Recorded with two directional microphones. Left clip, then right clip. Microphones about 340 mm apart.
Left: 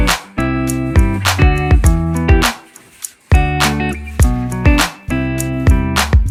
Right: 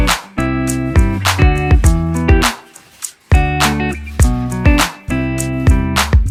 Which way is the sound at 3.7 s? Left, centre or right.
Right.